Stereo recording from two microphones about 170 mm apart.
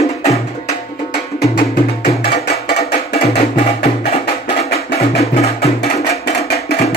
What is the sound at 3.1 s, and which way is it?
Music, 35° left (ahead or behind).